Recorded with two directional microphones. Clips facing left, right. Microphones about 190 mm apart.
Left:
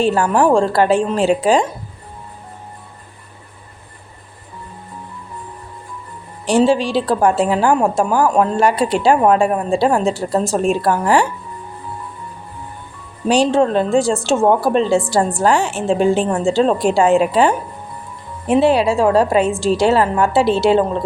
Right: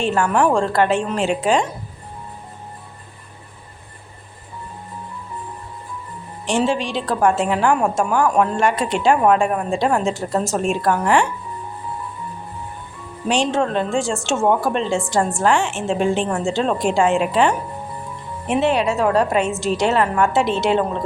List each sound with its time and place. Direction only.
0.0 s a woman's voice: 35° left (ahead or behind)
6.4 s a woman's voice: 35° left (ahead or behind)
13.2 s a woman's voice: 35° left (ahead or behind)